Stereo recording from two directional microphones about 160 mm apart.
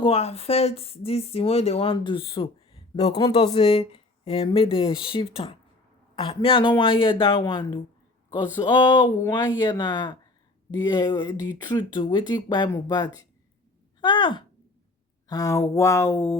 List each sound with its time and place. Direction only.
0.0 s speech: 40° left (ahead or behind)
14.0 s speech: 30° left (ahead or behind); by 16.4 s 15° left (ahead or behind)